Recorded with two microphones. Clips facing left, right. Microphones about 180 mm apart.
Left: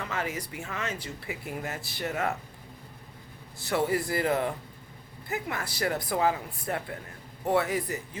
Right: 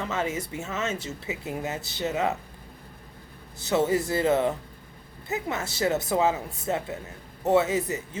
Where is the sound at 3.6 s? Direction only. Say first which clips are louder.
Right 4 dB; 20° right (ahead or behind).